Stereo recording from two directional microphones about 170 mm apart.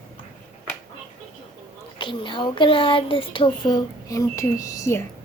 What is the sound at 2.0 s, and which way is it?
Speech, 30° left (ahead or behind).